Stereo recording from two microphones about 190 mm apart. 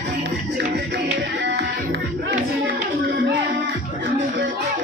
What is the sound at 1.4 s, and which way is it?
Music, 70° right (ahead or behind).